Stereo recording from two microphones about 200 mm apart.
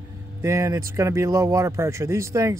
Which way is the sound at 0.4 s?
15° right (ahead or behind).